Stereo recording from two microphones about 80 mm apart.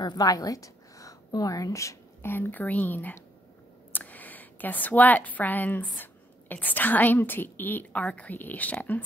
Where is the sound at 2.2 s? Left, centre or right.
Left.